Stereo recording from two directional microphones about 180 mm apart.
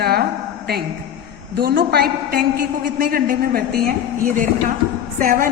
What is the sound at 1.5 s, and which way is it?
A woman's voice, 60° right (ahead or behind).